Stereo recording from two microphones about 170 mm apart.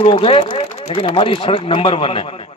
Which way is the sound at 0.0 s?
35° left (ahead or behind).